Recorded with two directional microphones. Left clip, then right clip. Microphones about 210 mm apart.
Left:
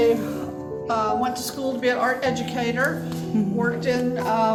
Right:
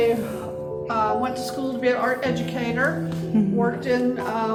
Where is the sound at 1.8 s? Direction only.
55° left (ahead or behind).